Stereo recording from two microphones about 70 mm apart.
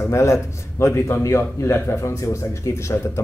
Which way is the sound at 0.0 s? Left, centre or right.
Left.